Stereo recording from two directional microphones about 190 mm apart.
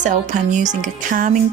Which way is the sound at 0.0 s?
40° right (ahead or behind).